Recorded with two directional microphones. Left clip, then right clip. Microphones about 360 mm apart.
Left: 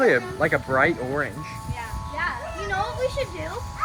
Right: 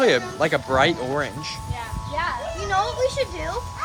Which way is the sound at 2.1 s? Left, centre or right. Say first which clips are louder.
Right 2 dB; right.